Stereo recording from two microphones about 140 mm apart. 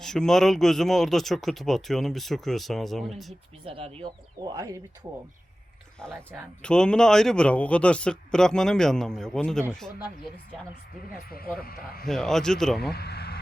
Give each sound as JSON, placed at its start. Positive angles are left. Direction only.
{"t": 0.0, "sound": "speech", "side_deg": 5}
{"t": 3.7, "sound": "speech", "side_deg": -45}
{"t": 4.4, "sound": "speech", "side_deg": -30}
{"t": 6.6, "sound": "speech", "side_deg": 5}
{"t": 11.1, "sound": "speech", "side_deg": 90}
{"t": 12.0, "sound": "speech", "side_deg": 5}